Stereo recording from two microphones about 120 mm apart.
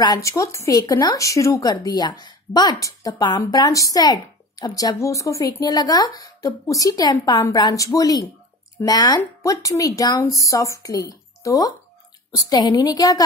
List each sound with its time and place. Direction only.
0.0 s a woman's voice: 30° left (ahead or behind)